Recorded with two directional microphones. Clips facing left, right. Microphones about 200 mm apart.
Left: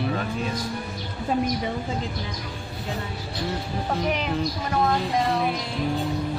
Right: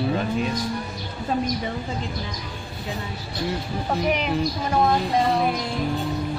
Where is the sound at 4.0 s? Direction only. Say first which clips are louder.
Right 4 dB; 15° right (ahead or behind).